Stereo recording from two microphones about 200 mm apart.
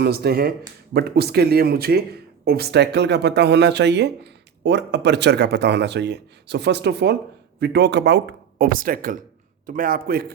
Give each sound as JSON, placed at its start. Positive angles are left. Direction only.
{"t": 0.0, "sound": "speech", "side_deg": -50}